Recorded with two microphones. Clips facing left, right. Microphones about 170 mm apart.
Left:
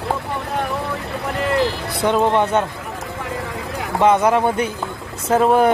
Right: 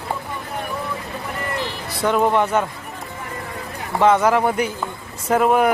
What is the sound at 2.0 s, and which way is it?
Speech, 20° left (ahead or behind).